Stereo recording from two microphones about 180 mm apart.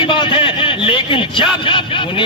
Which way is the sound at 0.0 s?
30° left (ahead or behind).